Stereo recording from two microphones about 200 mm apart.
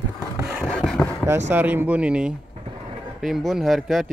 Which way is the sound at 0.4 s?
10° right (ahead or behind).